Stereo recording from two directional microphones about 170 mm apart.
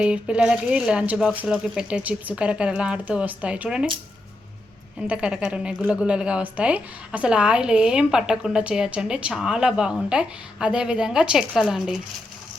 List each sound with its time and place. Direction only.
0.0 s a woman's voice: 5° right (ahead or behind)
5.0 s a woman's voice: 5° right (ahead or behind)